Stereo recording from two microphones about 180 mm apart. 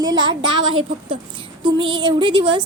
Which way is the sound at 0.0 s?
25° right (ahead or behind).